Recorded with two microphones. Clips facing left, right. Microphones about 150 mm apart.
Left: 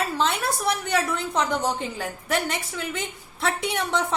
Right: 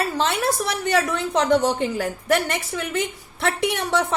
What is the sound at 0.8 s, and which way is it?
A woman's voice, 80° right.